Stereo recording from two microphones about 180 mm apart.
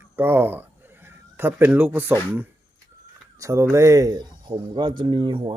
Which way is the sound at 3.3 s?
15° right (ahead or behind).